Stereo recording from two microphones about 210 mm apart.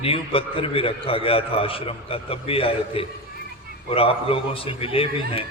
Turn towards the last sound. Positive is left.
turn(degrees=25)  # may be behind; listen again after turning